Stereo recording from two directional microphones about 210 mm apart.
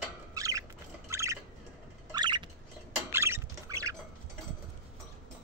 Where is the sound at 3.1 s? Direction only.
10° right (ahead or behind).